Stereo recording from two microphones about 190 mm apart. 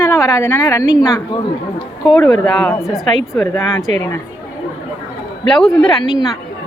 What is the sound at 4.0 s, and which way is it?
Speech, 15° left (ahead or behind).